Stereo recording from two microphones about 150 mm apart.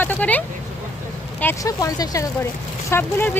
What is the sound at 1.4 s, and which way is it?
Speech, 20° left (ahead or behind).